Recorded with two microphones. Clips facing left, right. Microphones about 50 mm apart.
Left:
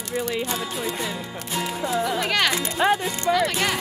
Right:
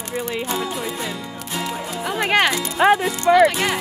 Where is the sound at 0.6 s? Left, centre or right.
Centre.